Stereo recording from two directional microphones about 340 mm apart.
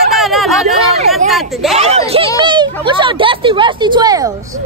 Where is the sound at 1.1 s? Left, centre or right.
Centre.